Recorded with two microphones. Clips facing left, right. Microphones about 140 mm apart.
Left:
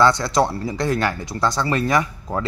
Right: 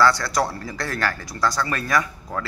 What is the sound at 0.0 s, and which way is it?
Speech, 20° left (ahead or behind).